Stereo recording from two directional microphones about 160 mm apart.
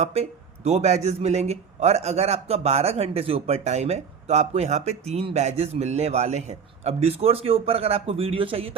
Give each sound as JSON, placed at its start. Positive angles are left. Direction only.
{"t": 0.0, "sound": "speech", "side_deg": -40}